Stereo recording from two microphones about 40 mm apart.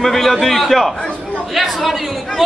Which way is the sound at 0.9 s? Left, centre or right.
Left.